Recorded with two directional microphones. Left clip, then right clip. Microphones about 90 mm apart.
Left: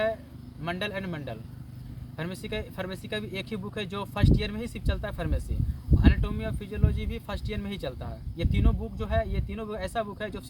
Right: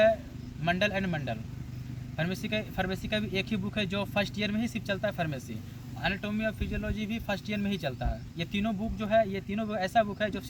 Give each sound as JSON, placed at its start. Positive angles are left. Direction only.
{"t": 0.6, "sound": "speech", "side_deg": 35}